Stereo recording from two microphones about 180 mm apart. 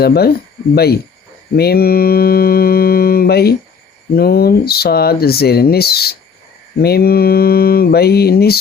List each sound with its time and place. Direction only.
0.0 s speech: 60° left (ahead or behind)
1.5 s mantra: 60° left (ahead or behind)
4.1 s speech: 60° left (ahead or behind)